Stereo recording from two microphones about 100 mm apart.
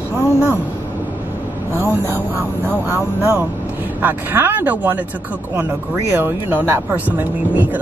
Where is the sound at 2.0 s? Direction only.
25° right (ahead or behind).